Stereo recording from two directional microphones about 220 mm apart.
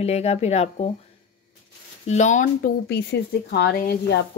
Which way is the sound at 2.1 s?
35° left (ahead or behind).